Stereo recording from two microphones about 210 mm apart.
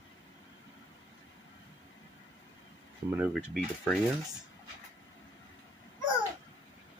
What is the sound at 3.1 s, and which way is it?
Speech, 5° right (ahead or behind).